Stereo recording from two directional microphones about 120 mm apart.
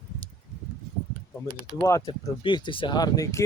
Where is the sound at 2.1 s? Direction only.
40° left (ahead or behind).